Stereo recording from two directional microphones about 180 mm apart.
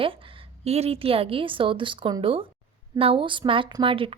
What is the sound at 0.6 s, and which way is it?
A woman's voice, 35° right (ahead or behind).